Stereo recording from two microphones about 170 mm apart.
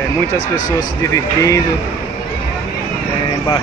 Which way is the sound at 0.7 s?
20° left (ahead or behind).